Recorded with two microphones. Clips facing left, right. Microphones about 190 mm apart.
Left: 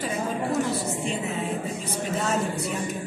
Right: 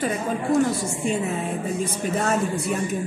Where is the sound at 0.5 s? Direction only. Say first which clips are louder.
Right 8 dB; centre (ahead or behind).